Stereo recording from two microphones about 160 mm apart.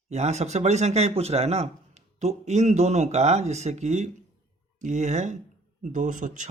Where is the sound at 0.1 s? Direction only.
45° right (ahead or behind).